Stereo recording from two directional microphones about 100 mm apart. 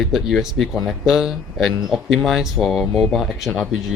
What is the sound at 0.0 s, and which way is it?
Speech, centre (ahead or behind).